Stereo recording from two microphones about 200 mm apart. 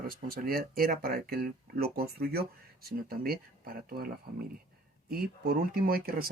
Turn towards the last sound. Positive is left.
turn(degrees=-45)  # may be behind; listen again after turning